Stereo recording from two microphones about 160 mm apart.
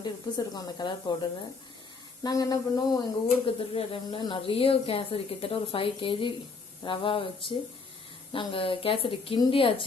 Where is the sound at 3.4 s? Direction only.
35° left (ahead or behind).